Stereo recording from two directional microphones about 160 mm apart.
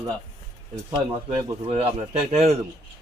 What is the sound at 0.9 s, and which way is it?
Speech, 40° right (ahead or behind).